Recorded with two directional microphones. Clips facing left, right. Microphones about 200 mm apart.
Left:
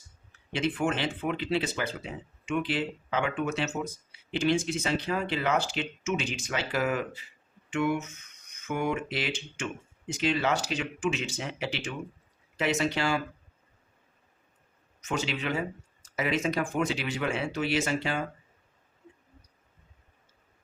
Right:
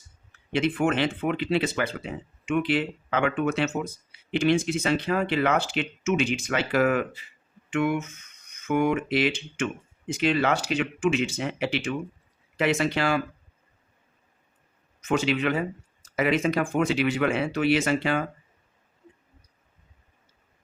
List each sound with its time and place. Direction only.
0.5 s speech: 60° right (ahead or behind)
15.0 s speech: 55° right (ahead or behind)